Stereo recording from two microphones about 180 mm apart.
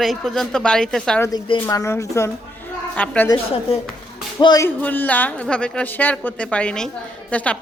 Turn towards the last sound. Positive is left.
turn(degrees=5)  # may be behind; listen again after turning